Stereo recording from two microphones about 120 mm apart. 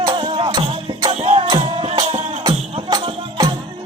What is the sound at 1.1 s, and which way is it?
Music, 65° right (ahead or behind).